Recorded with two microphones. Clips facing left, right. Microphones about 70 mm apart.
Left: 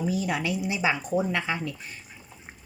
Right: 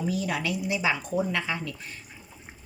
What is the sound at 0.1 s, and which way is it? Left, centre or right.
Speech, left.